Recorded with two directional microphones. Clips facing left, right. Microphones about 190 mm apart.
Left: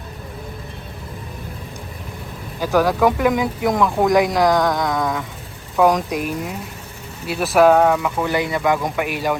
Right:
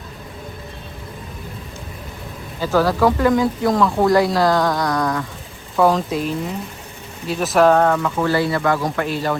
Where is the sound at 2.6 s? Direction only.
15° left (ahead or behind).